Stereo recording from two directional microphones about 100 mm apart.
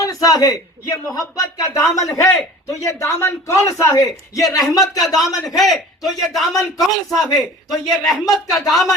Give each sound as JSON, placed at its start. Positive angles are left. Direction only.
{"t": 0.0, "sound": "a man's voice", "side_deg": 35}
{"t": 5.5, "sound": "a man's voice", "side_deg": 0}